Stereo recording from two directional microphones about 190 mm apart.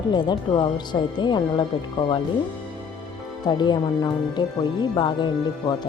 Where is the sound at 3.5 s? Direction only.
25° left (ahead or behind).